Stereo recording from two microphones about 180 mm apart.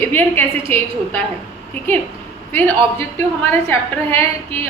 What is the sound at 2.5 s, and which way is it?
A woman's voice, 10° left (ahead or behind).